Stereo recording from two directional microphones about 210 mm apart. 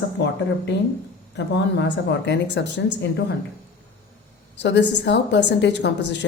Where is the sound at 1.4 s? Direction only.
55° left (ahead or behind).